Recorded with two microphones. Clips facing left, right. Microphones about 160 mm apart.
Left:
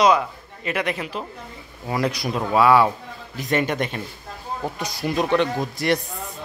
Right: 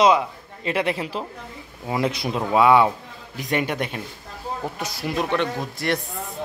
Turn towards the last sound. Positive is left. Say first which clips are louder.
# left 3 dB
turn(degrees=0)  # may be behind; listen again after turning